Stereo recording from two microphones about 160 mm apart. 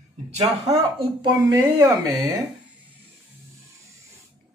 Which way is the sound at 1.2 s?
20° right (ahead or behind).